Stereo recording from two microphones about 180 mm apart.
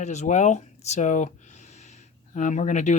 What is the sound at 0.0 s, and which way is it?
Speech, 40° left (ahead or behind).